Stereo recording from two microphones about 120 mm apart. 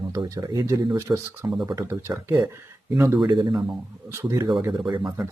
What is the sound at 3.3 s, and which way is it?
Speech, 40° right (ahead or behind).